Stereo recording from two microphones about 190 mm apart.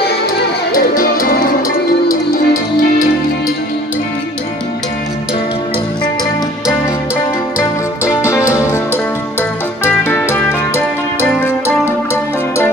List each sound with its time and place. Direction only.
0.7 s music: 45° left (ahead or behind)
8.0 s music: 15° left (ahead or behind)